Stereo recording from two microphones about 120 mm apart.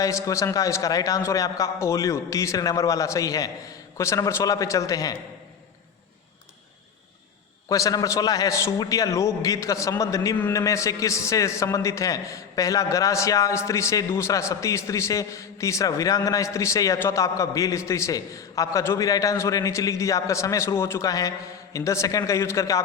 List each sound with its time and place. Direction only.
0.0 s a man's voice: 25° left (ahead or behind)
7.7 s a man's voice: 30° left (ahead or behind)